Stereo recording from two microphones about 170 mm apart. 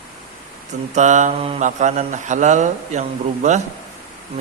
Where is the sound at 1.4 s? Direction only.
35° right (ahead or behind).